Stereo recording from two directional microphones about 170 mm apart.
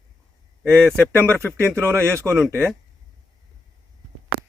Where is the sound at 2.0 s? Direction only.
15° right (ahead or behind).